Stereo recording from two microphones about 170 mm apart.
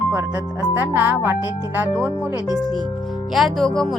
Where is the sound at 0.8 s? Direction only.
10° right (ahead or behind).